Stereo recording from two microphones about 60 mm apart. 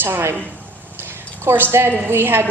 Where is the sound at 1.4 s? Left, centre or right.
Right.